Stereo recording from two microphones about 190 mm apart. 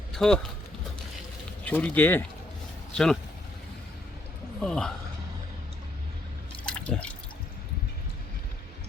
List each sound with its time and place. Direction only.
0.1 s speech: centre (ahead or behind)
1.6 s speech: 10° left (ahead or behind)
4.6 s speech: 5° left (ahead or behind)
6.7 s drip: 5° left (ahead or behind)